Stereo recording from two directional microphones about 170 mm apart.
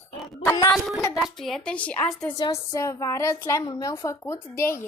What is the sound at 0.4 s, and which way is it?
Speech, 20° left (ahead or behind).